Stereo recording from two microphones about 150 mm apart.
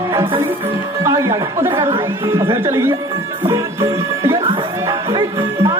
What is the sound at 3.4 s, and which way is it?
Music, 20° right (ahead or behind).